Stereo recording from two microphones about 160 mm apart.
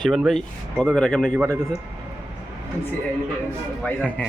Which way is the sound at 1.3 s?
20° right (ahead or behind).